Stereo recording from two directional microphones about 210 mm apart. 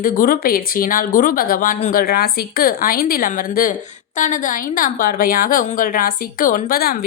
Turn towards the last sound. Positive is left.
turn(degrees=45)  # may be behind; listen again after turning